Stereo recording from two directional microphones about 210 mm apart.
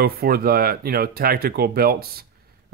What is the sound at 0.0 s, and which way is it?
Speech, 45° right (ahead or behind).